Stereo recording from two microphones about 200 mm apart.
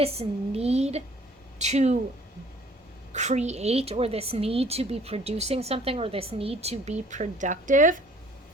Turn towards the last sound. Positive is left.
turn(degrees=-40)  # may be behind; listen again after turning